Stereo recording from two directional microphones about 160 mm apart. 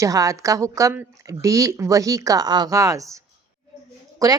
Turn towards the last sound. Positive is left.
turn(degrees=-25)  # may be behind; listen again after turning